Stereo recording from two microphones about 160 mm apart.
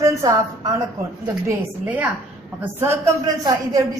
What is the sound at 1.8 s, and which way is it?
A woman's voice, 10° right (ahead or behind).